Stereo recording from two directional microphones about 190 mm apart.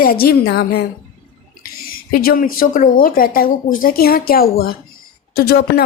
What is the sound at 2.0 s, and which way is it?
Speech, 50° left (ahead or behind).